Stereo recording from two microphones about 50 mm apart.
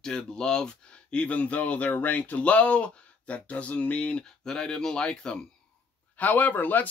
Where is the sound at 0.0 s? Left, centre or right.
Centre.